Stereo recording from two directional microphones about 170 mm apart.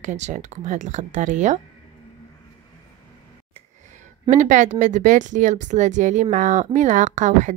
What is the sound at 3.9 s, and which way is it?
Speech, 45° right (ahead or behind).